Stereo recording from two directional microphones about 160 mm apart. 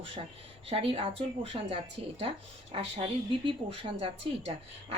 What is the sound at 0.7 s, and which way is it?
A woman's voice, 35° right (ahead or behind).